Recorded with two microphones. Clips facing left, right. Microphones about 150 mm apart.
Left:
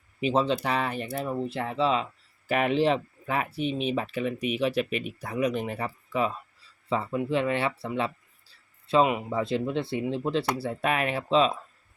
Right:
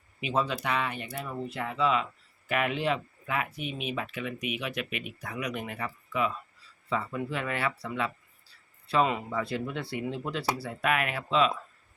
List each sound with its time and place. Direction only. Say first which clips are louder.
0.2 s speech: left 5 dB; 30° left (ahead or behind)